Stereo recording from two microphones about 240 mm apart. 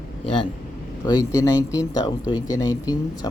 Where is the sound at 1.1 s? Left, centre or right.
Centre.